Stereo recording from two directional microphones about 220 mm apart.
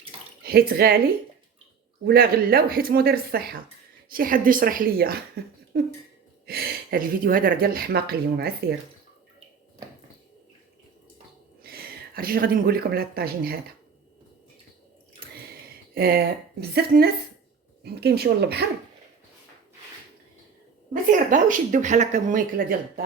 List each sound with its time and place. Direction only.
0.4 s speech: 45° right (ahead or behind)
2.0 s speech: 45° right (ahead or behind)
11.6 s speech: 45° right (ahead or behind)
16.0 s speech: 45° right (ahead or behind)
20.9 s speech: 35° right (ahead or behind)